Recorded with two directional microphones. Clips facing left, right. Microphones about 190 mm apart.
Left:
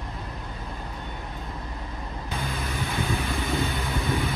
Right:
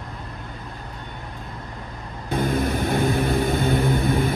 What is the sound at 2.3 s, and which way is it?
Vehicle, 50° right (ahead or behind).